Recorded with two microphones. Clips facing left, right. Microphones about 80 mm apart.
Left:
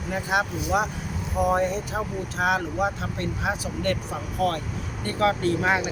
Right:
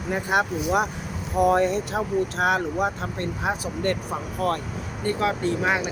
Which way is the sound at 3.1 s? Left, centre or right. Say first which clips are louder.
Right 1 dB; right.